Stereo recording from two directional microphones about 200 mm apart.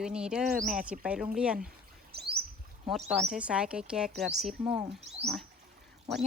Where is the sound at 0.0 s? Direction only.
5° right (ahead or behind).